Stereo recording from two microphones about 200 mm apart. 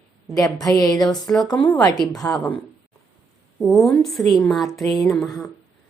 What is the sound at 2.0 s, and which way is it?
Speech, 20° left (ahead or behind).